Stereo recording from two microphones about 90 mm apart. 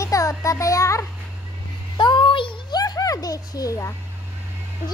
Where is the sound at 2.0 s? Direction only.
60° left (ahead or behind).